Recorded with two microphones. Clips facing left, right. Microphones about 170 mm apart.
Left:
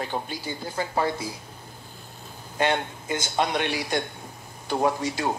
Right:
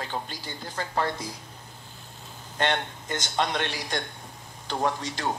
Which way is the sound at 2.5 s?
10° left (ahead or behind).